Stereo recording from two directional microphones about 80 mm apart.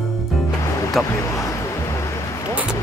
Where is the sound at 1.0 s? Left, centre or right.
Left.